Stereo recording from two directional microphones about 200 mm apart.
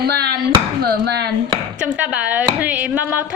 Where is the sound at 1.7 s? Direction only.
5° right (ahead or behind).